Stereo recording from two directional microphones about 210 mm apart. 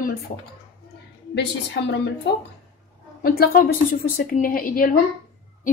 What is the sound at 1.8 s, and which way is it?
Speech, 55° left (ahead or behind).